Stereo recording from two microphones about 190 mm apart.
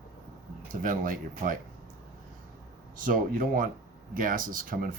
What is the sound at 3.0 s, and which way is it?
Speech, 45° right (ahead or behind).